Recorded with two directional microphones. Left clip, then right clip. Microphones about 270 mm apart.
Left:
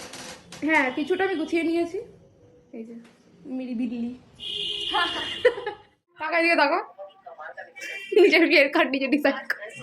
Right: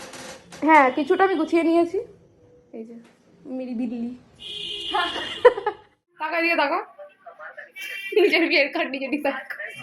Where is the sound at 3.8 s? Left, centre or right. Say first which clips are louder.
Right 1 dB; right.